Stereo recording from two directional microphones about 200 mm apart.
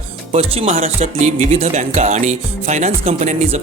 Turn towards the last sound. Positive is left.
turn(degrees=-35)  # may be behind; listen again after turning